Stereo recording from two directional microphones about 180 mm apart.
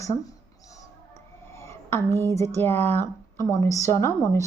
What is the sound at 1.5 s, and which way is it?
Speech, 15° left (ahead or behind).